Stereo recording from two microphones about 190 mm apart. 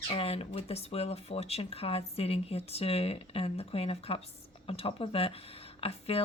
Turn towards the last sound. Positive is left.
turn(degrees=30)  # may be behind; listen again after turning